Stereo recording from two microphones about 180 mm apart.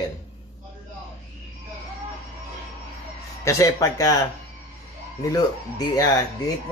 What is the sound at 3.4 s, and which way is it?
Speech, 20° left (ahead or behind).